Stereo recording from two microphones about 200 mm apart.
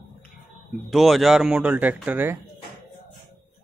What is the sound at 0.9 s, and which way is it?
Speech, centre (ahead or behind).